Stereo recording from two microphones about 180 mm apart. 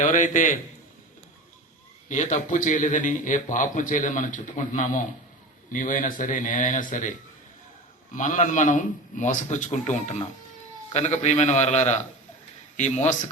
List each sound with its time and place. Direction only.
0.0 s speech: 45° left (ahead or behind)
2.0 s speech: 45° left (ahead or behind)
8.1 s a man's voice: 45° left (ahead or behind)